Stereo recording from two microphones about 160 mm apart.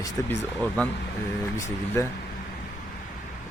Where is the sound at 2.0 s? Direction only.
20° left (ahead or behind).